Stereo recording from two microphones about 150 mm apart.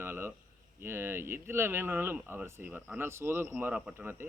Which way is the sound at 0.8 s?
15° right (ahead or behind).